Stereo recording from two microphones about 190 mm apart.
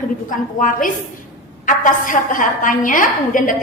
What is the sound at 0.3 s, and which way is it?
A woman's voice, 45° left (ahead or behind).